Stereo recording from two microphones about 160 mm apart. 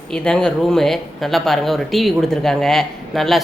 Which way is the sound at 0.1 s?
5° left (ahead or behind).